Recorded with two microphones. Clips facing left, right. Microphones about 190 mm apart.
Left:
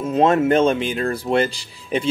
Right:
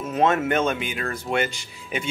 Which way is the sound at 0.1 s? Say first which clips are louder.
Left 5 dB; 30° left (ahead or behind).